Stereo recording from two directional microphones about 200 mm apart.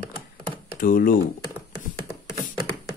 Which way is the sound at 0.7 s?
45° left (ahead or behind).